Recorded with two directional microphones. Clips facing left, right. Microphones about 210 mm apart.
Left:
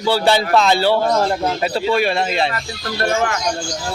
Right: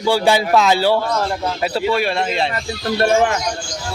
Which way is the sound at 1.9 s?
Centre (ahead or behind).